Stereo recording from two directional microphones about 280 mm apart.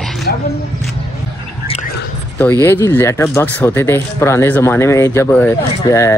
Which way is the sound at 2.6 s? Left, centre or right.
Centre.